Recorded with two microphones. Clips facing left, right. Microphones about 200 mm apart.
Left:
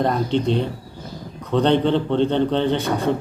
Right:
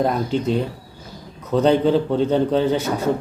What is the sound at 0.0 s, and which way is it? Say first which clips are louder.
A man's voice: even; 5° right (ahead or behind).